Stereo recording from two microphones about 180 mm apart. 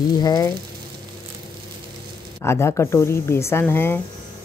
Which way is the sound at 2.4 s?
15° left (ahead or behind).